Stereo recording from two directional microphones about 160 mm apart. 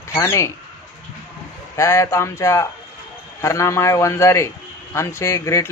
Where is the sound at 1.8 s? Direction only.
20° left (ahead or behind).